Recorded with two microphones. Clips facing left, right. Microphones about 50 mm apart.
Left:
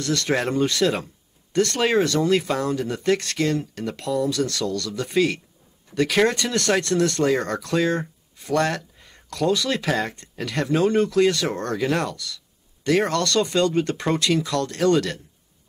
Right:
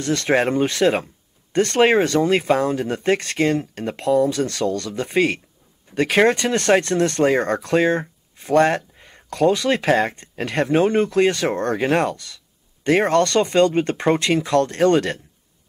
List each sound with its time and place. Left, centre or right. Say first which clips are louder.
0.0 s speech: right 4 dB; right